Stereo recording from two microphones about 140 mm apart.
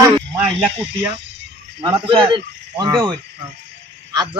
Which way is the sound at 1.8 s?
35° right (ahead or behind).